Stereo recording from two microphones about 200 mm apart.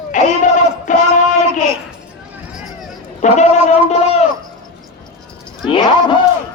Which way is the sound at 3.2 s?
35° left (ahead or behind).